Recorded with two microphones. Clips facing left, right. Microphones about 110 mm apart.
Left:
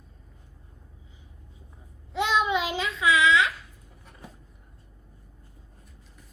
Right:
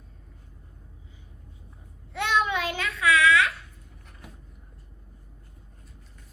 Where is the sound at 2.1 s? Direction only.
15° left (ahead or behind).